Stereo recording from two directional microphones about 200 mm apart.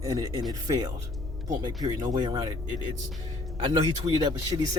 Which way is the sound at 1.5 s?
20° right (ahead or behind).